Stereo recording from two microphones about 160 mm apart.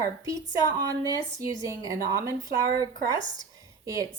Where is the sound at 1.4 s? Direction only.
20° right (ahead or behind).